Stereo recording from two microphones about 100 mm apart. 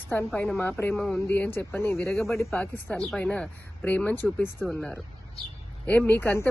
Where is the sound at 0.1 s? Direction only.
15° left (ahead or behind).